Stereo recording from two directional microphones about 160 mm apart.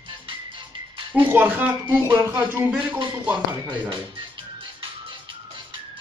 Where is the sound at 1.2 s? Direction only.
15° right (ahead or behind).